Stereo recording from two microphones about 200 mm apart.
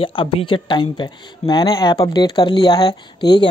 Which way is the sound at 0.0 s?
25° left (ahead or behind).